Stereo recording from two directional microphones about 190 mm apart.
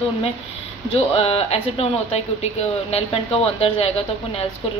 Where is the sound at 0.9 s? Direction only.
30° left (ahead or behind).